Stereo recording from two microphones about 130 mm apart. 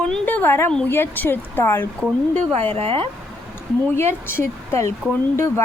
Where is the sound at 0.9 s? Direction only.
15° left (ahead or behind).